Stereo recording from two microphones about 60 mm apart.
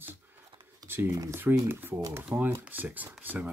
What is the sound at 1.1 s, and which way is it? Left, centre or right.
Speech, right.